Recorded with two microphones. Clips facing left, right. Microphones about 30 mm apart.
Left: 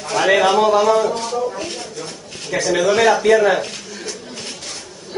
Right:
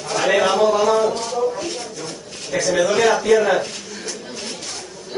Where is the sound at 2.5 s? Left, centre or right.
Left.